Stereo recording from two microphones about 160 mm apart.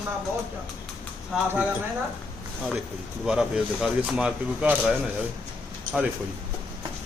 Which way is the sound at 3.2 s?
5° right (ahead or behind).